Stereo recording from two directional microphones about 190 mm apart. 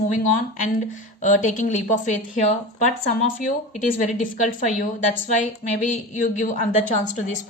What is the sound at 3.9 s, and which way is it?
A woman's voice, 45° left (ahead or behind).